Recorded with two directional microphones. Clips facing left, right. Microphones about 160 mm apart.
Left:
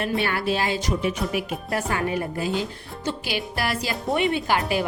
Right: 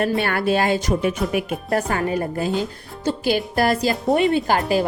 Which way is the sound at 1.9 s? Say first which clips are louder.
Right 3 dB; 40° right (ahead or behind).